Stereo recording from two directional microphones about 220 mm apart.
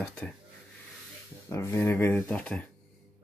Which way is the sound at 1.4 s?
15° left (ahead or behind).